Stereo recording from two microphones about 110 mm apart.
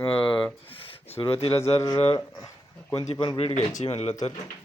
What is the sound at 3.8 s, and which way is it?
Speech, 70° left (ahead or behind).